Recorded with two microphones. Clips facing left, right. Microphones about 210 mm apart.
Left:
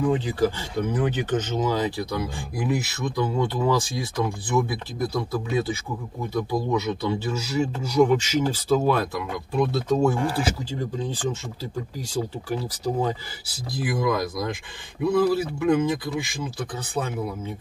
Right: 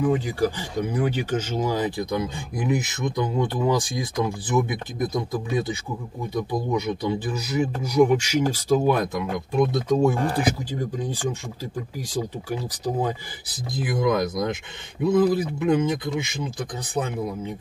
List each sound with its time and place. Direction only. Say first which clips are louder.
0.0 s speech: even; 15° right (ahead or behind)